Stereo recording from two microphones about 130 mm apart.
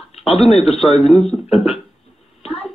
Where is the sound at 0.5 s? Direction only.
50° left (ahead or behind).